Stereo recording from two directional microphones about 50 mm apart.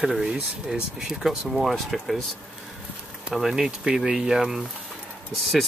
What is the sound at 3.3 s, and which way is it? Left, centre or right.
Speech, centre.